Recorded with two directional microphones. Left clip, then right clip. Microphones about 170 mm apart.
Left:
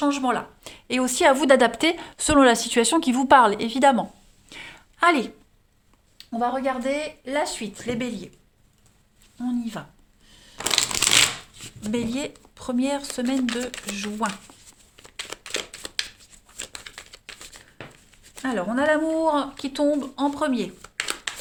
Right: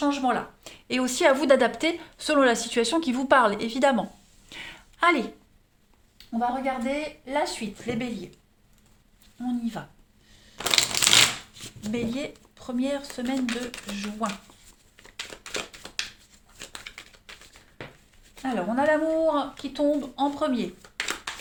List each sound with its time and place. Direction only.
0.0 s speech: 40° left (ahead or behind)
4.4 s a sound: 15° left (ahead or behind)
5.0 s speech: 35° left (ahead or behind)
6.1 s speech: 65° left (ahead or behind)
7.3 s speech: 45° left (ahead or behind)
9.4 s speech: 40° left (ahead or behind)
10.3 s crushing: 40° left (ahead or behind)
10.6 s crushing: 25° left (ahead or behind)
11.9 s speech: 50° left (ahead or behind)
18.4 s speech: 50° left (ahead or behind)